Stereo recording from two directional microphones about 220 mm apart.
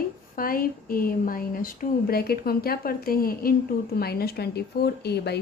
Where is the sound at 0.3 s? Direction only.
40° left (ahead or behind).